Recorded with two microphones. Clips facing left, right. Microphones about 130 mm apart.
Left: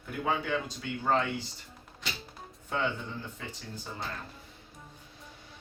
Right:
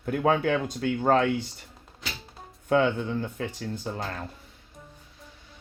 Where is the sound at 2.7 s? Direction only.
65° right (ahead or behind).